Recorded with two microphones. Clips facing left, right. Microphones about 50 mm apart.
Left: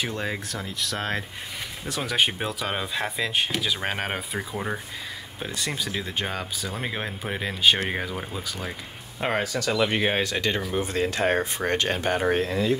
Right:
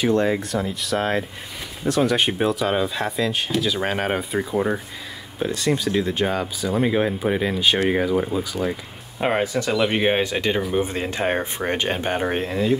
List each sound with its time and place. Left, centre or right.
0.0 s speech: centre; by 12.7 s right